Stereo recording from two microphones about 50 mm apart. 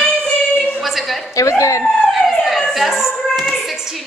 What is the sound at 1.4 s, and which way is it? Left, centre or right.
Speech, left.